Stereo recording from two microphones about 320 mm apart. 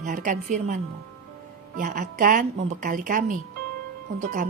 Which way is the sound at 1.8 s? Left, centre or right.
Right.